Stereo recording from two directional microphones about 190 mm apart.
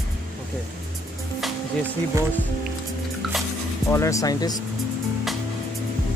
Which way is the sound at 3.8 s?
15° left (ahead or behind).